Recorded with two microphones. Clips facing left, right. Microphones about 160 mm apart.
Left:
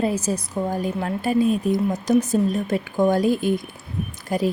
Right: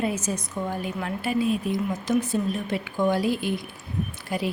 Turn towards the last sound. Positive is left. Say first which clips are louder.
# left 5 dB
turn(degrees=45)  # may be behind; listen again after turning